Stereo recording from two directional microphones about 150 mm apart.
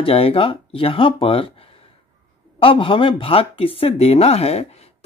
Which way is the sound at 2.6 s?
35° left (ahead or behind).